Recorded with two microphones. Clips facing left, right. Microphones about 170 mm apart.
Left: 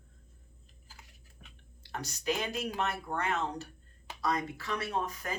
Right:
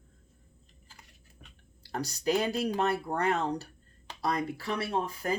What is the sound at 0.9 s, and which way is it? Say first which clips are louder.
Typing: even; 5° left (ahead or behind).